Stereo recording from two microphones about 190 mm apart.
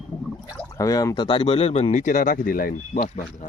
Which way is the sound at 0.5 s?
15° left (ahead or behind).